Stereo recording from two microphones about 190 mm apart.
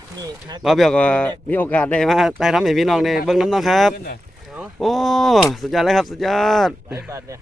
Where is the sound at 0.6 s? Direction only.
Centre (ahead or behind).